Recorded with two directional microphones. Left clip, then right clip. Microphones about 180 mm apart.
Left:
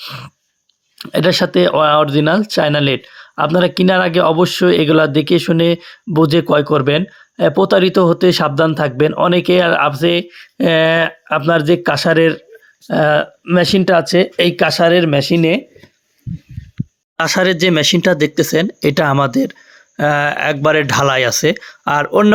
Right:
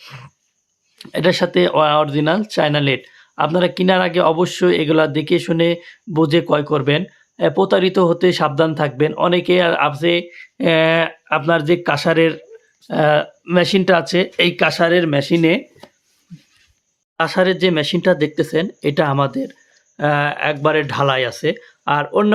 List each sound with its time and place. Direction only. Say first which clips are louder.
0.0 s a sound: left 9 dB; 20° left (ahead or behind)
0.9 s speech: left 3 dB; 25° left (ahead or behind)
17.2 s speech: left 2 dB; 30° left (ahead or behind)